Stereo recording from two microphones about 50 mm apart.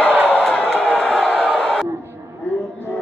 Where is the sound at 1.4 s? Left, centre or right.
Centre.